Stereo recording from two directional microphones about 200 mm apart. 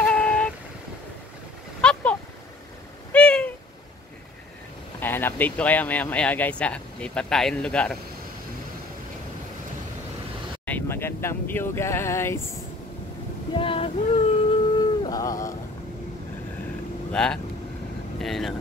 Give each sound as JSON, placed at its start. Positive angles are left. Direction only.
{"t": 0.0, "sound": "vehicle", "side_deg": 5}
{"t": 1.8, "sound": "a sound", "side_deg": 5}
{"t": 5.0, "sound": "speech", "side_deg": 10}
{"t": 10.6, "sound": "speech", "side_deg": 10}
{"t": 13.6, "sound": "a sound", "side_deg": 25}
{"t": 17.1, "sound": "speech", "side_deg": 5}